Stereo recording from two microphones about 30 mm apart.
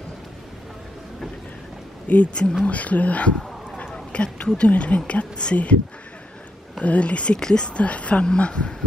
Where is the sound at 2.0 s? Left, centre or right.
Left.